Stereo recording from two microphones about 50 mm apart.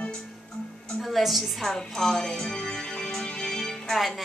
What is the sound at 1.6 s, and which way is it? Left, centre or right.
Music, centre.